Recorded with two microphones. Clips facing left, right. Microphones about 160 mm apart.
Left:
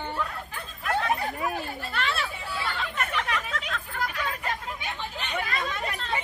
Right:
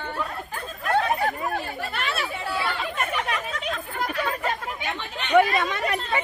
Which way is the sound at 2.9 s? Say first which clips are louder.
Right 2 dB; 20° right (ahead or behind).